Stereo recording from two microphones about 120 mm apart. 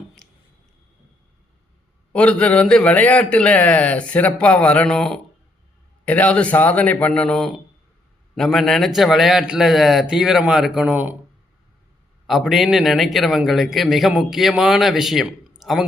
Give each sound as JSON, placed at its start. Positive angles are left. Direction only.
{"t": 2.1, "sound": "a man's voice", "side_deg": 10}
{"t": 12.3, "sound": "a man's voice", "side_deg": 0}